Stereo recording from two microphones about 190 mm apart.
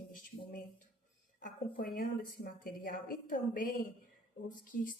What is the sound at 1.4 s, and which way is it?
A woman's voice, 45° left (ahead or behind).